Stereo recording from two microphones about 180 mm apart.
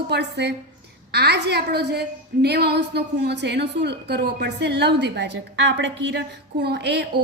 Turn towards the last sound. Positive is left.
turn(degrees=-70)  # may be behind; listen again after turning